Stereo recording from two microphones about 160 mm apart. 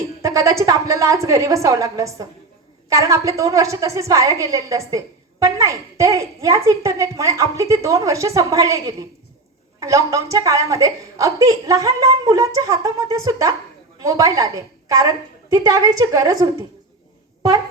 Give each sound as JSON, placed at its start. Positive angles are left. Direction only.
{"t": 0.2, "sound": "a woman's voice", "side_deg": -20}